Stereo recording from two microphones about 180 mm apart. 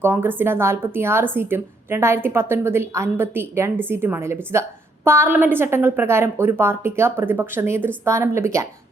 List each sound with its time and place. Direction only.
0.0 s a woman's voice: 10° right (ahead or behind)